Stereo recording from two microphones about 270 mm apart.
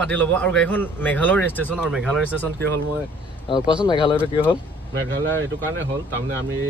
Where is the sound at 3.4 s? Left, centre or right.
Centre.